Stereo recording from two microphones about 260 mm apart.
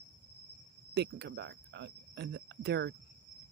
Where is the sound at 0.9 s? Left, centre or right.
Right.